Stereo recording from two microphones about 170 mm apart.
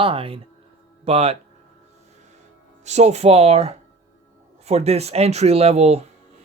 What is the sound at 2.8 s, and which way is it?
Speech, 40° right (ahead or behind).